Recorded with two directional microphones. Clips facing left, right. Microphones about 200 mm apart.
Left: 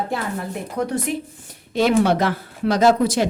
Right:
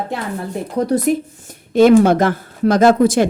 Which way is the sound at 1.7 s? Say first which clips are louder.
Right 7 dB; 50° right (ahead or behind).